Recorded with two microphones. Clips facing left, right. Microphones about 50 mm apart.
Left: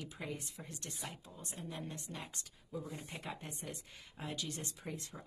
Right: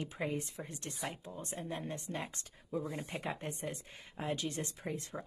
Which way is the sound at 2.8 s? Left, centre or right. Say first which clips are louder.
Right 6 dB; right.